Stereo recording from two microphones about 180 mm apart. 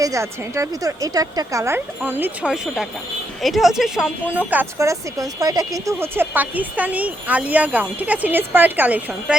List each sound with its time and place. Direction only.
0.0 s a woman's voice: 15° right (ahead or behind)